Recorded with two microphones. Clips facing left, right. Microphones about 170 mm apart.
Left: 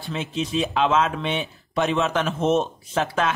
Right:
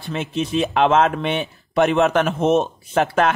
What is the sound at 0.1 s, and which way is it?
Speech, 55° right (ahead or behind).